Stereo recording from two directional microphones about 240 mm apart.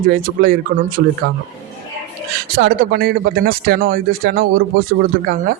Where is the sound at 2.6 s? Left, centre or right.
Right.